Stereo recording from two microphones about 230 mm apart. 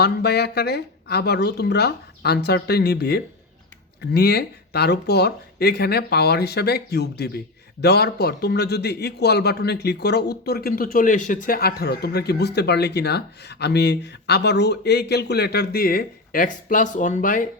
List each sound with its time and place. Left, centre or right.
0.0 s speech: left